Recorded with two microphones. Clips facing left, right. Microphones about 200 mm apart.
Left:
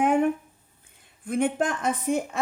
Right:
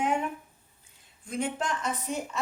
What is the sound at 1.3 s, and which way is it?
Speech, 55° left (ahead or behind).